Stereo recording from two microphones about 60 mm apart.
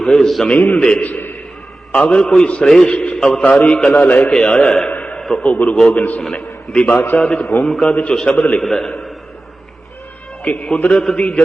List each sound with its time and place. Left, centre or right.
0.0 s a man's voice: centre
0.4 s a man's voice: left; by 2.9 s centre
2.9 s a man's voice: centre
3.2 s a man's voice: centre
3.4 s a man's voice: left
4.3 s a man's voice: centre
4.9 s a sound: left
5.4 s a man's voice: left
5.6 s a man's voice: centre
5.9 s a man's voice: left
7.6 s a man's voice: centre
7.9 s a man's voice: centre
8.6 s a man's voice: centre
10.4 s a man's voice: left